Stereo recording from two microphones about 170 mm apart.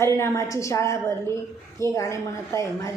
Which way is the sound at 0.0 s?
15° left (ahead or behind).